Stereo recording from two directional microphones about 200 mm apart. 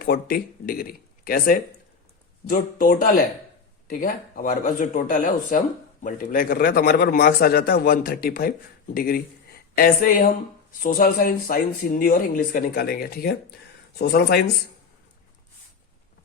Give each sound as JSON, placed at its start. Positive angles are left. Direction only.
{"t": 0.0, "sound": "speech", "side_deg": 50}